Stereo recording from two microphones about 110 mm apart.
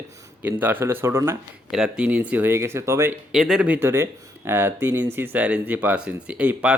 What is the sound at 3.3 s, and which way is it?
Speech, 5° right (ahead or behind).